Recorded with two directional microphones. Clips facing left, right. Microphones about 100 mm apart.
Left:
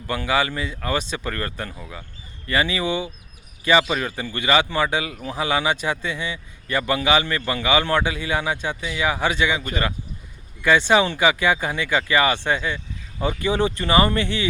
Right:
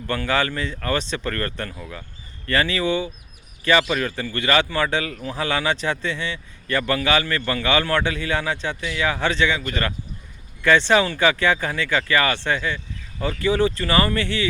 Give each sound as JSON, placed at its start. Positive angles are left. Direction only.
{"t": 0.1, "sound": "speech", "side_deg": 10}